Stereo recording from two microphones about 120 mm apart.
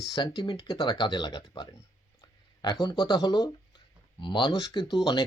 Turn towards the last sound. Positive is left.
turn(degrees=40)  # may be behind; listen again after turning